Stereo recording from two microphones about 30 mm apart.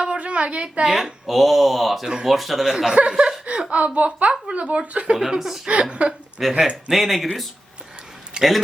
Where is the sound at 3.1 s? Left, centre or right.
Right.